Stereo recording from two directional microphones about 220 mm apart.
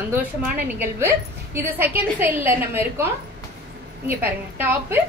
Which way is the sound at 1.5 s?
10° right (ahead or behind).